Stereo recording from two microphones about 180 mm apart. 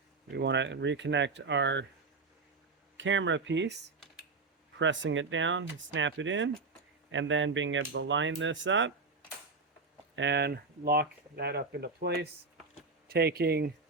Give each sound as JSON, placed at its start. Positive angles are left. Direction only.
{"t": 0.3, "sound": "speech", "side_deg": -75}
{"t": 3.0, "sound": "speech", "side_deg": -90}
{"t": 4.8, "sound": "speech", "side_deg": -90}
{"t": 10.2, "sound": "speech", "side_deg": -80}